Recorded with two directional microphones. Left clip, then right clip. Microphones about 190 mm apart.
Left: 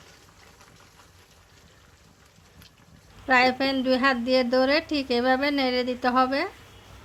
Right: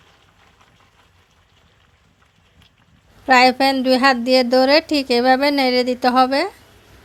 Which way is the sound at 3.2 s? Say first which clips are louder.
Right 8 dB; 40° right (ahead or behind).